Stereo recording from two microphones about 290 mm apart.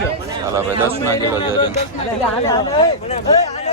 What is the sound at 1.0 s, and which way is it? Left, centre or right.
Speech, centre.